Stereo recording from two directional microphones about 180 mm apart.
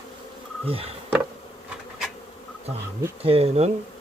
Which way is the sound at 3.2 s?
35° right (ahead or behind).